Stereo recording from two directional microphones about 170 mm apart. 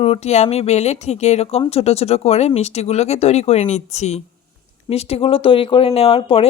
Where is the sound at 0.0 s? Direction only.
40° left (ahead or behind).